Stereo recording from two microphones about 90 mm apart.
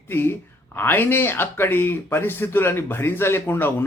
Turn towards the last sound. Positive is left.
turn(degrees=25)  # may be behind; listen again after turning